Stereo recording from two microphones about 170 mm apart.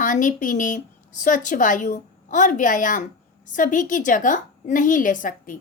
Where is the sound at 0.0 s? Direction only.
50° left (ahead or behind).